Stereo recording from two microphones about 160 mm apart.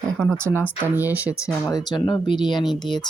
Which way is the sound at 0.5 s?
10° left (ahead or behind).